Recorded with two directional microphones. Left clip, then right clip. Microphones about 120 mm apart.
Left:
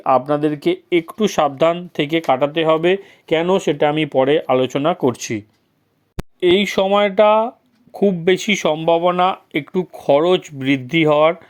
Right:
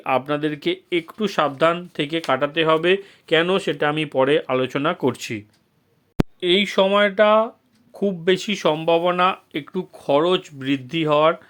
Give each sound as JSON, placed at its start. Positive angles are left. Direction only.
{"t": 0.0, "sound": "speech", "side_deg": 20}
{"t": 6.7, "sound": "speech", "side_deg": 25}